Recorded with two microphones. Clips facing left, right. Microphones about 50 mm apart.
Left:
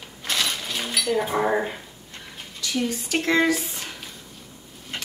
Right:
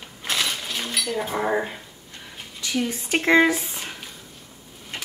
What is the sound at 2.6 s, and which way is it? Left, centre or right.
Speech, centre.